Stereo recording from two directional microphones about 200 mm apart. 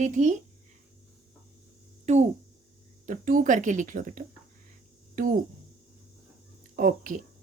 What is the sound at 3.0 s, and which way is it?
Speech, 40° right (ahead or behind).